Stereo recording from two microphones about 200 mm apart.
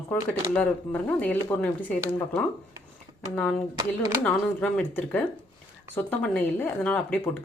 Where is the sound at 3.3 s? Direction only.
5° left (ahead or behind).